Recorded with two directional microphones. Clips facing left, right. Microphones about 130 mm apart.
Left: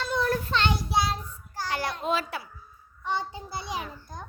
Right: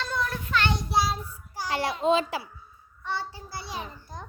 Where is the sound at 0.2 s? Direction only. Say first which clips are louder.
Left 2 dB; 30° left (ahead or behind).